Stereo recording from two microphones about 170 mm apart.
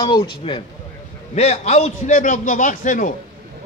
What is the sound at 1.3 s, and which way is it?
A man's voice, 40° left (ahead or behind).